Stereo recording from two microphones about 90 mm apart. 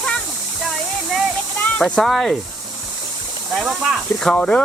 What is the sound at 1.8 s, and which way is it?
Speech, centre (ahead or behind).